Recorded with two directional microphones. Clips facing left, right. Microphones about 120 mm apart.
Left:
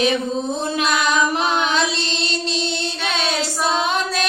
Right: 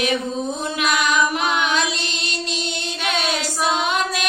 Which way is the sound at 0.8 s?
35° left (ahead or behind).